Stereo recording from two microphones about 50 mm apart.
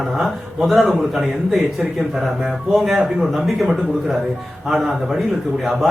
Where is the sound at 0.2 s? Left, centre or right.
Centre.